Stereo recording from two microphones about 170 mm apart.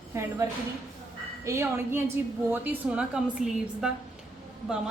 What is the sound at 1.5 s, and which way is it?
A woman's voice, 15° right (ahead or behind).